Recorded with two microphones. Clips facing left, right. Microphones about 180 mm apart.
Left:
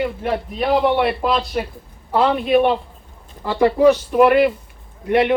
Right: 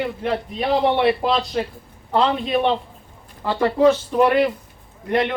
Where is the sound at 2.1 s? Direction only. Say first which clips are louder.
Left 4 dB; 10° left (ahead or behind).